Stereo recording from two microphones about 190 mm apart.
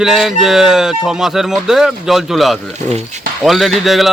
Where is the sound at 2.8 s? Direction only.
35° right (ahead or behind).